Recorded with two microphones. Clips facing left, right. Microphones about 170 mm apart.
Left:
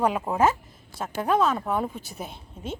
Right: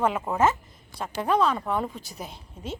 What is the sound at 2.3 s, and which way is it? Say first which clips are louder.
Speech: left 1 dB; 55° left (ahead or behind).